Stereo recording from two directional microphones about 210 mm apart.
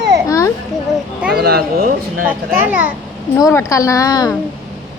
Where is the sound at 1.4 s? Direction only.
50° right (ahead or behind).